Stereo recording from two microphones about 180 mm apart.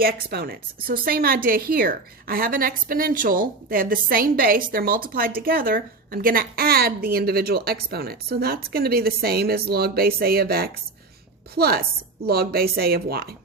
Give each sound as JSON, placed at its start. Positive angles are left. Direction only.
{"t": 0.0, "sound": "a woman's voice", "side_deg": -60}